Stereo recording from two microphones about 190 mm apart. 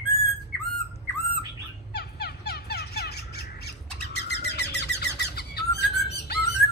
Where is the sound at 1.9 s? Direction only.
60° left (ahead or behind).